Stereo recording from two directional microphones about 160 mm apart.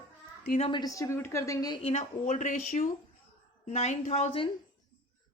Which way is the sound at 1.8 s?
40° left (ahead or behind).